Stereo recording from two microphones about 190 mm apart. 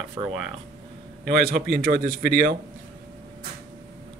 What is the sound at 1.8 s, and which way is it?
Speech, 50° right (ahead or behind).